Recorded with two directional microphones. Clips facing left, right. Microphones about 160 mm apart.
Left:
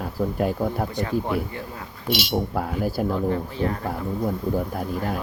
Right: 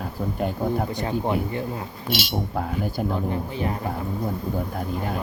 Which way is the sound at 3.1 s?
20° right (ahead or behind).